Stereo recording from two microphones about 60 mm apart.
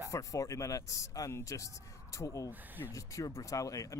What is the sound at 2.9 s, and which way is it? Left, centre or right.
Speech, left.